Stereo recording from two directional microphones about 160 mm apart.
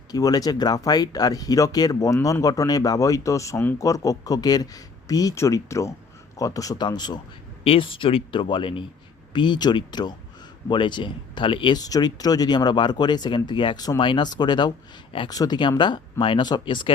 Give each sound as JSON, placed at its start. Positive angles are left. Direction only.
{"t": 0.1, "sound": "speech", "side_deg": 25}